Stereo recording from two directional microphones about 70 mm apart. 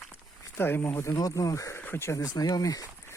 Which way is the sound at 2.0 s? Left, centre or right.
Left.